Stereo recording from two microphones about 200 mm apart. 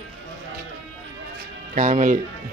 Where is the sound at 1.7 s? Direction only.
40° right (ahead or behind).